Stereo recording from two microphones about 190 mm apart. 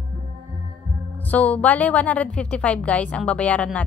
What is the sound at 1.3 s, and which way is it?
A woman's voice, 10° left (ahead or behind).